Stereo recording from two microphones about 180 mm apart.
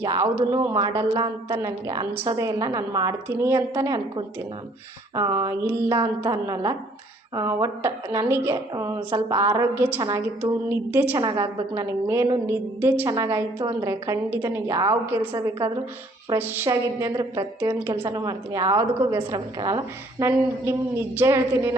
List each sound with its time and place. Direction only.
0.0 s a woman's voice: 20° right (ahead or behind)
0.8 s a woman's voice: 25° right (ahead or behind); by 15.3 s 10° right (ahead or behind)
16.3 s a woman's voice: 15° right (ahead or behind)